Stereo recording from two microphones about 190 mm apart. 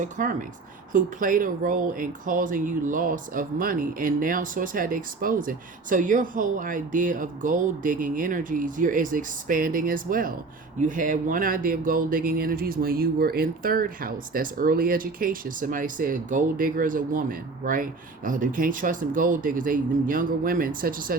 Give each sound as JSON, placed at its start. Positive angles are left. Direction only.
{"t": 0.0, "sound": "speech", "side_deg": -45}